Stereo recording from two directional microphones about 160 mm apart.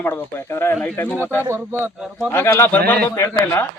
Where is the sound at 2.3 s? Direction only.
15° left (ahead or behind).